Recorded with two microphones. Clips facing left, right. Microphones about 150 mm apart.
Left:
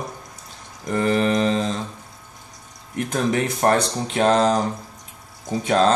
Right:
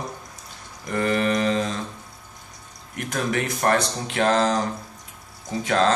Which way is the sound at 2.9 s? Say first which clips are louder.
Left 4 dB; 30° left (ahead or behind).